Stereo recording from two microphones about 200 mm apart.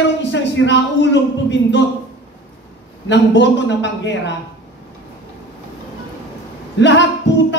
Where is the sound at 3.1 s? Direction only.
65° left (ahead or behind).